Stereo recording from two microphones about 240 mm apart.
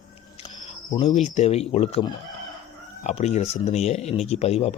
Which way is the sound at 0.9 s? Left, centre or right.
Left.